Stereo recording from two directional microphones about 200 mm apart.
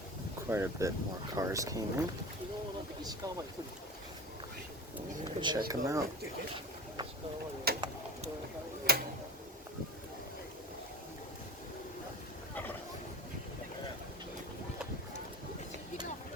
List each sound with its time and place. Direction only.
0.5 s speech: 15° right (ahead or behind)
5.2 s speech: 20° right (ahead or behind)
7.7 s a sound: 50° right (ahead or behind)
8.9 s tick-tock: 50° right (ahead or behind)